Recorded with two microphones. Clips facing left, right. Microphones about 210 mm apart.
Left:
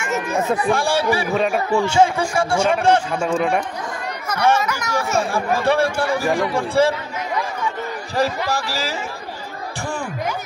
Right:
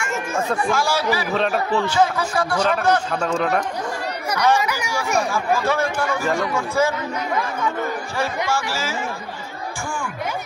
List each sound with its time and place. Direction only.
0.0 s speech: 20° left (ahead or behind)
0.7 s speech: 30° left (ahead or behind)
1.3 s speech: 10° left (ahead or behind)
1.9 s speech: 25° left (ahead or behind)
3.1 s speech: 10° left (ahead or behind)
4.3 s speech: 10° right (ahead or behind)
5.3 s speech: 30° left (ahead or behind)
8.5 s speech: 35° left (ahead or behind)